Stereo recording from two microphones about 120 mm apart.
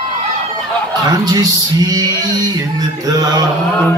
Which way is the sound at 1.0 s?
30° right (ahead or behind).